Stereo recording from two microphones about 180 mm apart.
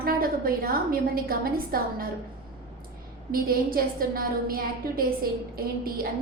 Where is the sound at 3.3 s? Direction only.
55° right (ahead or behind).